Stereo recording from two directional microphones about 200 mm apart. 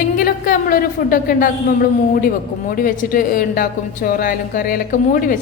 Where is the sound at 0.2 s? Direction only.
45° left (ahead or behind).